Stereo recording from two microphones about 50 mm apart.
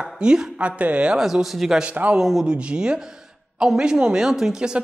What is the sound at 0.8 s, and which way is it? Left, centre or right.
Speech, right.